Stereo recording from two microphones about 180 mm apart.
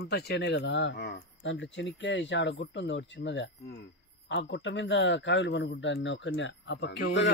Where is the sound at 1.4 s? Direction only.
90° left.